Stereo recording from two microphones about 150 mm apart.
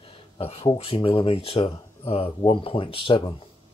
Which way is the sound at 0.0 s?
40° left (ahead or behind).